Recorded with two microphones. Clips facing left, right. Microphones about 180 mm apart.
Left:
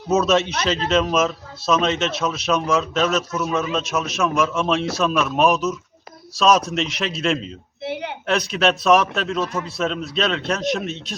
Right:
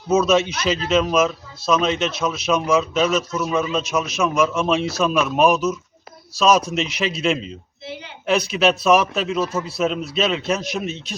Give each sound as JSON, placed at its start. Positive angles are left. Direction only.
{"t": 0.1, "sound": "speech", "side_deg": 0}